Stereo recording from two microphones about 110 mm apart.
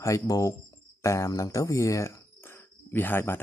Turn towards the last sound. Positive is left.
turn(degrees=20)  # may be behind; listen again after turning